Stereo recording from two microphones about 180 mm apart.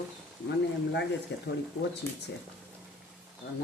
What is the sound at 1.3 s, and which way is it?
Speech, 70° left (ahead or behind).